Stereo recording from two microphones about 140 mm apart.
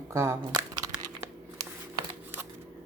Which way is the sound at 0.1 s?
20° right (ahead or behind).